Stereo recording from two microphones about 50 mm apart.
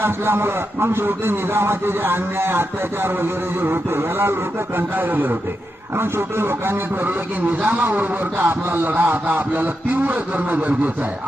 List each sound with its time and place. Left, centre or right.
0.0 s speech: right
3.6 s a sound: right
4.9 s speech: right
6.0 s speech: right
7.6 s speech: right